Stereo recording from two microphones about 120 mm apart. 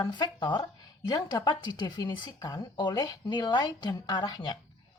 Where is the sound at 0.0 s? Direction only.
40° left (ahead or behind).